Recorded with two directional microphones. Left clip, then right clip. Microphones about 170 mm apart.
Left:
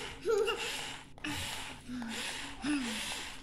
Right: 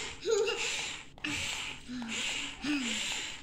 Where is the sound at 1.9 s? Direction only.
15° left (ahead or behind).